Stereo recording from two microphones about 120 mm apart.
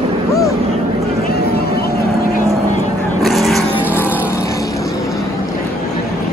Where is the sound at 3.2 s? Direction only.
Centre (ahead or behind).